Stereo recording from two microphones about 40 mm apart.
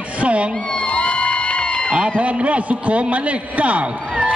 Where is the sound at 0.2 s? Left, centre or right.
Right.